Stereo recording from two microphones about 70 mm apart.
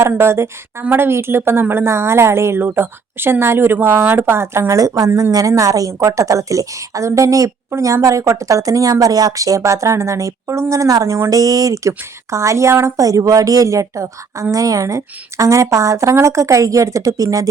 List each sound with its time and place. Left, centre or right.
0.2 s a woman's voice: right
13.0 s speech: right